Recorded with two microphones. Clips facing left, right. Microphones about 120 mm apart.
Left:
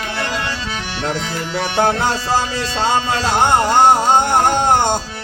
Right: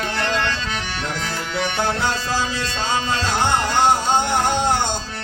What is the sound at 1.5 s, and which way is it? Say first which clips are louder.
Music: left 6 dB; 50° left (ahead or behind).